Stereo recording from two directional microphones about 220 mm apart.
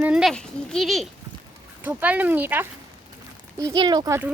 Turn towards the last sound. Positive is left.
turn(degrees=-15)  # may be behind; listen again after turning